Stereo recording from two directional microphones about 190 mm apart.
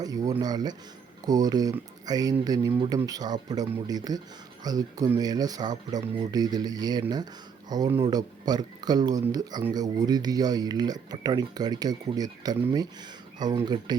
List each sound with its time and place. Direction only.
0.0 s speech: 20° right (ahead or behind)